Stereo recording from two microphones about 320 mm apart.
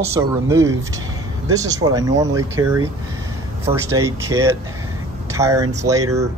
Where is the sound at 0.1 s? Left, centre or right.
Centre.